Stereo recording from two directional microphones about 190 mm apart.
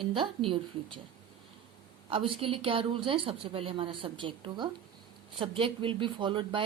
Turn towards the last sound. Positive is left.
turn(degrees=-25)  # may be behind; listen again after turning